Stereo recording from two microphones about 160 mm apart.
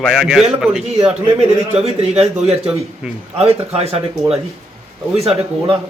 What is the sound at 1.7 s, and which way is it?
A man's voice, 40° right (ahead or behind).